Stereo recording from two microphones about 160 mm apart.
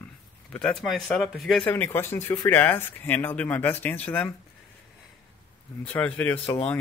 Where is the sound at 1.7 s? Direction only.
15° left (ahead or behind).